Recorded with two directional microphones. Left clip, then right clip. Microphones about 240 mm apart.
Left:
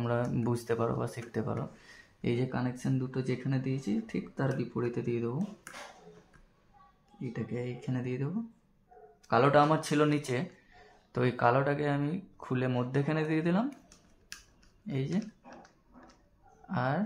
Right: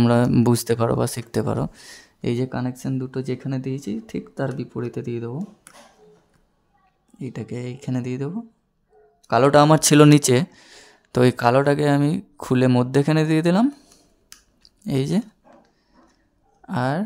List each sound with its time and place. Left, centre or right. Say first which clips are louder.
0.0 s speech: right 14 dB; right
7.2 s speech: right 6 dB; right
9.3 s speech: right 10 dB; right
14.9 s speech: right 12 dB; right
16.6 s speech: right 8 dB; right